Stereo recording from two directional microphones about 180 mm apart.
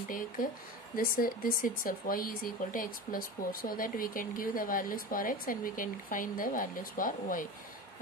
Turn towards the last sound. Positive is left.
turn(degrees=50)  # may be behind; listen again after turning